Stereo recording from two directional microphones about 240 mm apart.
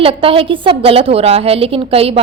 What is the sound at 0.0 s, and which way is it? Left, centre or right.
A woman's voice, right.